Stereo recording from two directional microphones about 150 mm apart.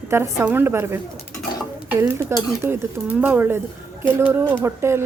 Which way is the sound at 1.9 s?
20° right (ahead or behind).